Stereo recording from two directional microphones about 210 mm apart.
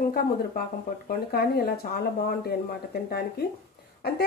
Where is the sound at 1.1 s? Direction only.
45° left (ahead or behind).